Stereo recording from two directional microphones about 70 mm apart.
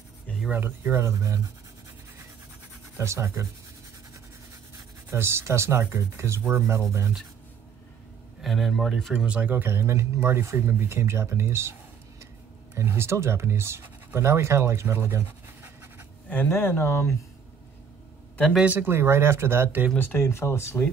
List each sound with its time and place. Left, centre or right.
0.5 s speech: right
3.0 s speech: right
5.1 s speech: right
8.4 s speech: centre; by 9.7 s right
9.7 s speech: right
12.7 s speech: right
16.4 s speech: left
18.8 s speech: right
20.0 s speech: left
20.2 s speech: left